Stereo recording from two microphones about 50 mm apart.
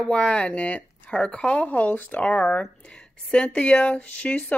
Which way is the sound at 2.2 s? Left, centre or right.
Left.